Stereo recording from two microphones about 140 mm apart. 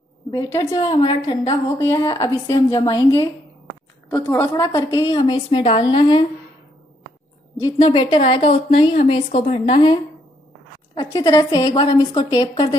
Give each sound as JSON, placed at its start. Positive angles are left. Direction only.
{"t": 0.3, "sound": "a woman's voice", "side_deg": 25}
{"t": 0.7, "sound": "a woman's voice", "side_deg": 35}
{"t": 1.8, "sound": "a woman's voice", "side_deg": 25}
{"t": 5.1, "sound": "a woman's voice", "side_deg": 35}
{"t": 7.8, "sound": "a woman's voice", "side_deg": 40}
{"t": 11.0, "sound": "a woman's voice", "side_deg": 25}